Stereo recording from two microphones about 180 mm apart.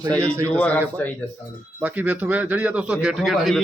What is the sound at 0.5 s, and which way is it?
Speech, 10° left (ahead or behind).